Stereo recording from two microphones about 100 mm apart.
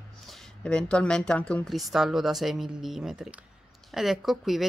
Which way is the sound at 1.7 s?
Centre (ahead or behind).